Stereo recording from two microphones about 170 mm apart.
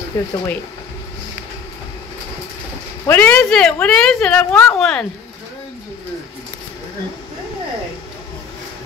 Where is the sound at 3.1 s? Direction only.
10° left (ahead or behind).